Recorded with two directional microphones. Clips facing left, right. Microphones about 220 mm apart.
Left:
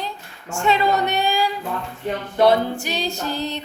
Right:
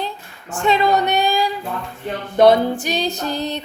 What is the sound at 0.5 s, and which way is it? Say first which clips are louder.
Female singing: right 2 dB; 20° right (ahead or behind).